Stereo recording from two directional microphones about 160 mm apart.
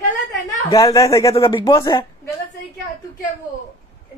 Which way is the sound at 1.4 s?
30° left (ahead or behind).